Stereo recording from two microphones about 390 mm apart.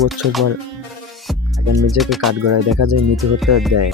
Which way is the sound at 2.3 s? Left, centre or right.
Right.